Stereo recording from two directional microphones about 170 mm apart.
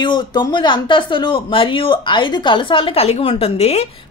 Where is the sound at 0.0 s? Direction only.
25° left (ahead or behind).